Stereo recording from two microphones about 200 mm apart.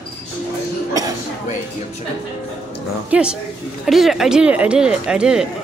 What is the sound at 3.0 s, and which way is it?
Speech, 5° right (ahead or behind).